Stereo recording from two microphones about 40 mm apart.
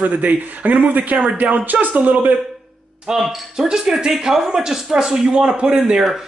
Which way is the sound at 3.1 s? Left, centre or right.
Centre.